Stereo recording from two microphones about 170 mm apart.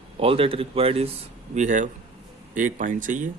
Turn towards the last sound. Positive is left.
turn(degrees=-50)  # may be behind; listen again after turning